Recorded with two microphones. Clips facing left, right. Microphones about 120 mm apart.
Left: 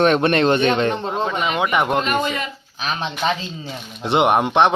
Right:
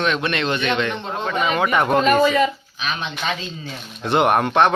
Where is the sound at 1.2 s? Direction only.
10° left (ahead or behind).